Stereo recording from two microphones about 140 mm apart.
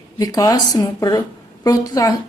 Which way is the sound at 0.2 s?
25° left (ahead or behind).